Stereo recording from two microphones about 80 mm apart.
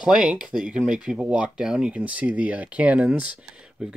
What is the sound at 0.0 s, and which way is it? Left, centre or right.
Speech, centre.